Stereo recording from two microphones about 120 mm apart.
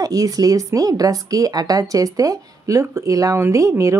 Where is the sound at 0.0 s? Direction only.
30° right (ahead or behind).